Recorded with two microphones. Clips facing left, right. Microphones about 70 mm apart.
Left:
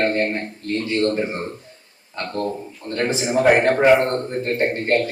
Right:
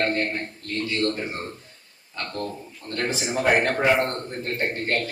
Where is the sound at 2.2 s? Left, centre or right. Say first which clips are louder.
Left 6 dB; left.